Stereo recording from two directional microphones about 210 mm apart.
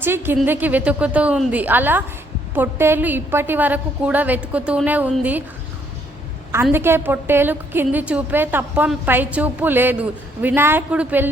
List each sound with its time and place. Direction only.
0.0 s a woman's voice: 10° right (ahead or behind)
6.5 s a woman's voice: 10° right (ahead or behind)